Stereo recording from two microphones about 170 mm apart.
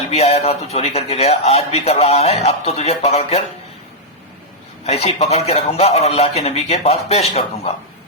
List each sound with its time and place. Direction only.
0.1 s speech: 40° left (ahead or behind)
4.8 s speech: 40° left (ahead or behind)